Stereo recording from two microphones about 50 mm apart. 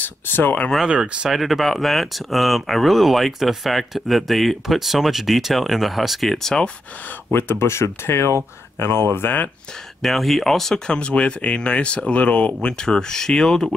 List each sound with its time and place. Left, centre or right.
0.0 s speech: left
0.8 s speech: right
1.3 s speech: centre
7.3 s speech: left
10.0 s speech: centre
10.9 s speech: left
12.6 s speech: centre